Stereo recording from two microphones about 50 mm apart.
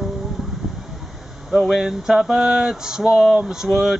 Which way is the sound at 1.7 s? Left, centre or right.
Centre.